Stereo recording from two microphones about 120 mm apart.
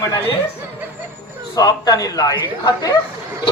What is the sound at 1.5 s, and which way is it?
A man's voice, 30° left (ahead or behind).